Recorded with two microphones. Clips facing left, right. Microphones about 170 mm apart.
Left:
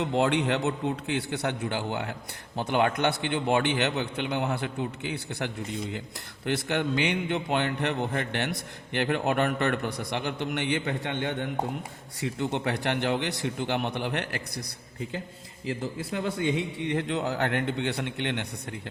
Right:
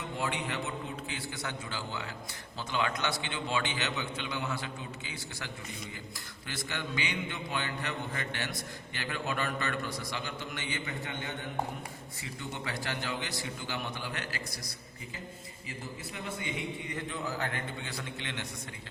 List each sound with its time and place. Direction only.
0.0 s a man's voice: 70° left (ahead or behind)
15.6 s a man's voice: 75° left (ahead or behind)